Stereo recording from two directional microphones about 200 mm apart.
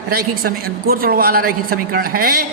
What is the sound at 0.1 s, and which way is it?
A woman's voice, 50° right (ahead or behind).